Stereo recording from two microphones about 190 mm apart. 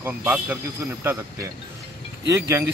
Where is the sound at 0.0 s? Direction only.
10° right (ahead or behind).